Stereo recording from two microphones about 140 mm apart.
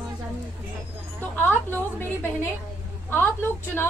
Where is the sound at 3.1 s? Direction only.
15° left (ahead or behind).